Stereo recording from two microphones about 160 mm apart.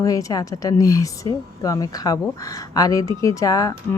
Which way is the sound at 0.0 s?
20° left (ahead or behind).